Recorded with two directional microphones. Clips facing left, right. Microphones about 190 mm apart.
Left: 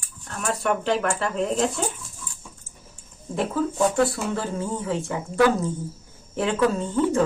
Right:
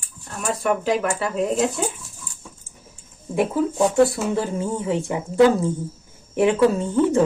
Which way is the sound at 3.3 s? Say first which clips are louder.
Right 4 dB; 15° right (ahead or behind).